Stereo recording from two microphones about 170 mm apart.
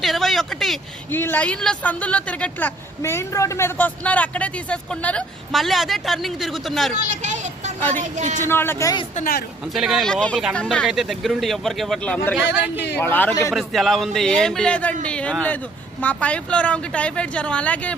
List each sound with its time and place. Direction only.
0.0 s speech: centre (ahead or behind)
1.1 s speech: 10° left (ahead or behind)
7.1 s a sound: 45° right (ahead or behind)
7.8 s a woman's voice: 10° left (ahead or behind)
8.1 s speech: 45° right (ahead or behind)
8.4 s speech: 15° left (ahead or behind)
9.1 s a woman's voice: 60° left (ahead or behind)
9.7 s speech: centre (ahead or behind)
13.5 s speech: centre (ahead or behind)